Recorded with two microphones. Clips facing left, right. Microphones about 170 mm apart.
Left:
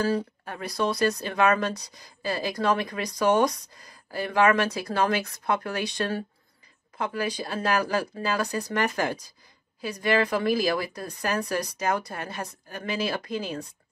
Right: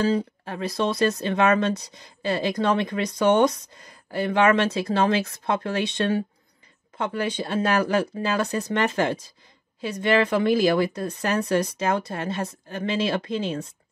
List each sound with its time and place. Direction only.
0.0 s speech: 20° right (ahead or behind)